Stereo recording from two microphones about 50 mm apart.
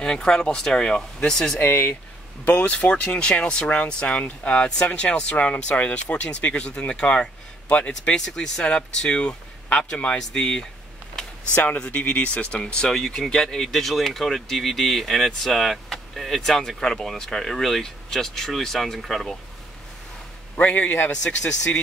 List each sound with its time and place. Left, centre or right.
0.0 s speech: centre
1.6 s speech: left
2.4 s speech: left
11.5 s speech: left; by 19.3 s centre
20.5 s speech: left
21.1 s speech: centre